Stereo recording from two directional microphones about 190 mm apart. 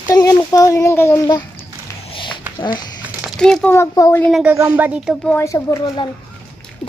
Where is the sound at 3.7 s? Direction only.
15° left (ahead or behind).